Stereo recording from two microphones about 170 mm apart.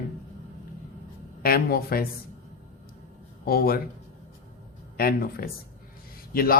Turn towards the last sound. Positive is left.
turn(degrees=60)  # may be behind; listen again after turning